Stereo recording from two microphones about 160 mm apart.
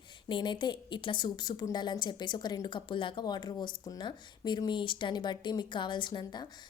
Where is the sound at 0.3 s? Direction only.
30° left (ahead or behind).